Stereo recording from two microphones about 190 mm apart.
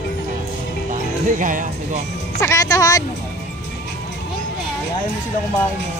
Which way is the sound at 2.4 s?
15° left (ahead or behind).